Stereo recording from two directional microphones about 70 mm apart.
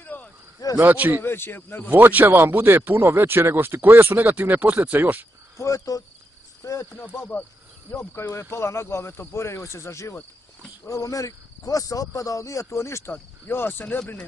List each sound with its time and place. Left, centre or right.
0.0 s a sound: left
0.7 s speech: right
1.2 s speech: left
1.9 s speech: right
5.6 s speech: left
6.6 s cricket: left
6.9 s cricket: left
8.0 s speech: left
10.9 s speech: left
13.1 s cricket: left